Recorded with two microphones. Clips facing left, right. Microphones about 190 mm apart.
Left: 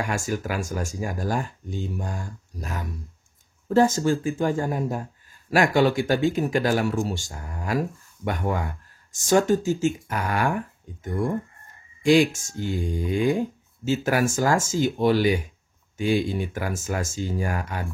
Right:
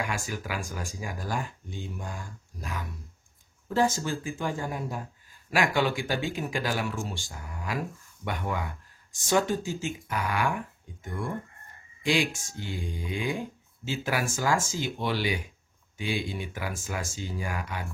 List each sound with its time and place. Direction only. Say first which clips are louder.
0.0 s speech: left 6 dB; 45° left (ahead or behind)